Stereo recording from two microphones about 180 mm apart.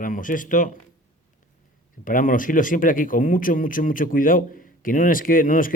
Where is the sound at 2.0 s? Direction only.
50° left (ahead or behind).